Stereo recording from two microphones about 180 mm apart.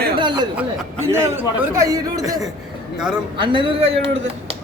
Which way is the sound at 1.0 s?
15° right (ahead or behind).